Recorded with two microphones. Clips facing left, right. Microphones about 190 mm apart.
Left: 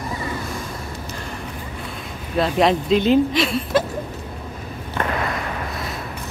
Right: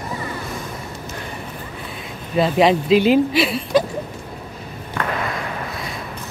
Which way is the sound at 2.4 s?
Centre (ahead or behind).